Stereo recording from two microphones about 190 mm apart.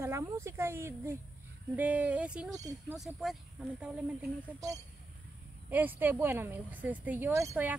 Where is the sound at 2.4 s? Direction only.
15° right (ahead or behind).